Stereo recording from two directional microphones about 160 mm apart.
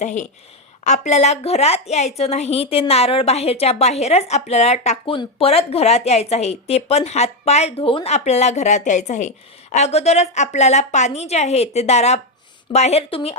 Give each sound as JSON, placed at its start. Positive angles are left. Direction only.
{"t": 0.0, "sound": "a woman's voice", "side_deg": 45}